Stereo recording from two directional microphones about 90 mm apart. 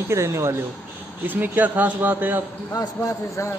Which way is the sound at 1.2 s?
20° right (ahead or behind).